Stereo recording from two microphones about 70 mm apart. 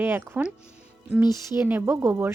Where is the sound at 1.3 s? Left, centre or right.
Right.